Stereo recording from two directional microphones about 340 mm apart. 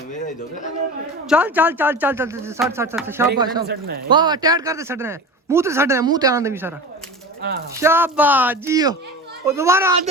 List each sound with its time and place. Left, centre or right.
1.3 s a man's voice: centre
3.6 s speech: right
4.1 s a man's voice: centre
7.8 s a man's voice: centre